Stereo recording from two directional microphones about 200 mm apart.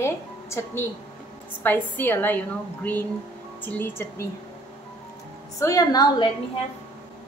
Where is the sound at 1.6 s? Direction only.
10° left (ahead or behind).